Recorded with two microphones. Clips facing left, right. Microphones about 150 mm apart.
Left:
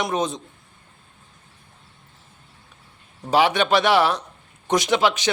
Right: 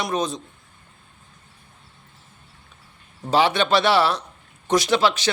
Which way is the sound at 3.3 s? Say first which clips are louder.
Left 1 dB; 10° left (ahead or behind).